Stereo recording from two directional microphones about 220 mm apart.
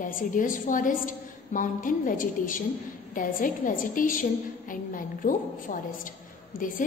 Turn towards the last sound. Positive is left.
turn(degrees=40)  # may be behind; listen again after turning